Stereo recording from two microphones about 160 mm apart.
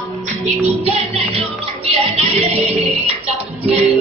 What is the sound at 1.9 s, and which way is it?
Music, 40° right (ahead or behind).